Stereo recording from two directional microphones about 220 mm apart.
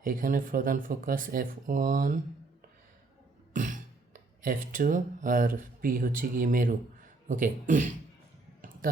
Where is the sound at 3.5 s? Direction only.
35° right (ahead or behind).